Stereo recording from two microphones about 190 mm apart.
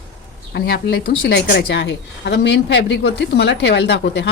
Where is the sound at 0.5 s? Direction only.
60° left (ahead or behind).